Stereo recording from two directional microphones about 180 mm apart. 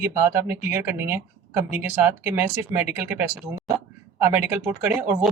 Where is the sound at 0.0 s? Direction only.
15° right (ahead or behind).